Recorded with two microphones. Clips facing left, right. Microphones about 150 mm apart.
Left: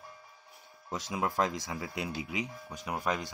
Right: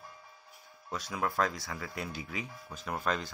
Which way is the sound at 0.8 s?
20° left (ahead or behind).